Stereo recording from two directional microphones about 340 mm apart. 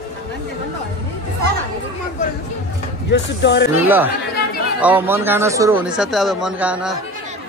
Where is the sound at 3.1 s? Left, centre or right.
Left.